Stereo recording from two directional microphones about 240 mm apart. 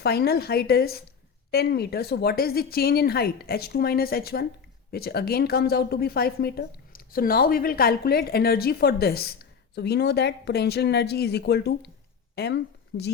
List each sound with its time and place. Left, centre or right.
0.0 s a woman's voice: left
12.9 s speech: left